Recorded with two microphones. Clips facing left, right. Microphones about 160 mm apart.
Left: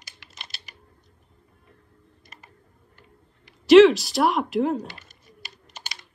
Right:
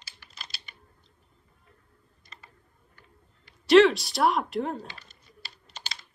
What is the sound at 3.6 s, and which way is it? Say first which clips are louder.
Speech: left 5 dB; centre (ahead or behind).